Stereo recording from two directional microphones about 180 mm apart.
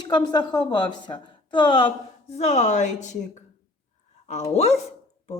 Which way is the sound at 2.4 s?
40° left (ahead or behind).